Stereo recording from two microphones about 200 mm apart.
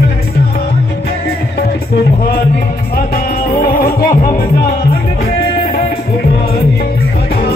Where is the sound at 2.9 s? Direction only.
45° left (ahead or behind).